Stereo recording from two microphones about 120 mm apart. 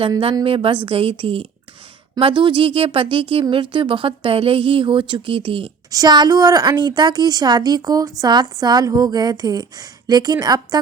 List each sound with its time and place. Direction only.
0.4 s speech: 50° right (ahead or behind)
5.9 s a woman's voice: 35° right (ahead or behind)